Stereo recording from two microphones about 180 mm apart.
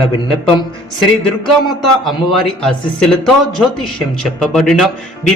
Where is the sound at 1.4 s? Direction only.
Centre (ahead or behind).